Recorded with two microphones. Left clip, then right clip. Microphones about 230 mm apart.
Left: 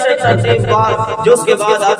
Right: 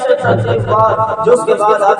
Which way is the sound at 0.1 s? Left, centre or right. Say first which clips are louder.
Right 2 dB; left.